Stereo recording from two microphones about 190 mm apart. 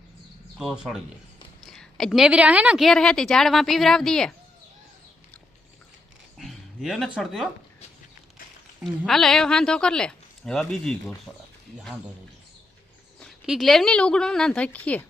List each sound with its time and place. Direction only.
0.6 s a woman's voice: centre (ahead or behind)
6.4 s speech: centre (ahead or behind)
8.8 s a woman's voice: centre (ahead or behind)
13.1 s a woman's voice: centre (ahead or behind)